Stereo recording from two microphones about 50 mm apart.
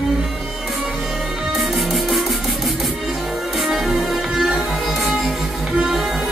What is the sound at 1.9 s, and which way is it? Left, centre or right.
Music, centre.